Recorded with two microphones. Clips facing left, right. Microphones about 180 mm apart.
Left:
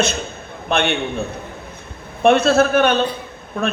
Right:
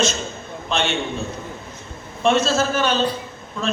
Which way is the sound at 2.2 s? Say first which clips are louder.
Left 5 dB; 60° left (ahead or behind).